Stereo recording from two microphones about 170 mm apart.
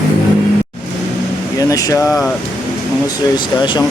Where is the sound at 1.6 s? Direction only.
20° left (ahead or behind).